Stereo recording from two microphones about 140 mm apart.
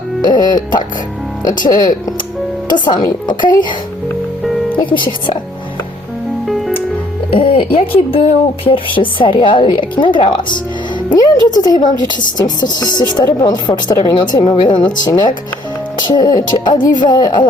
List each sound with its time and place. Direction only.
0.2 s music: 30° left (ahead or behind)
1.4 s speech: 30° left (ahead or behind)
4.8 s speech: 35° left (ahead or behind)
6.5 s music: centre (ahead or behind)
7.3 s a woman's voice: 40° left (ahead or behind)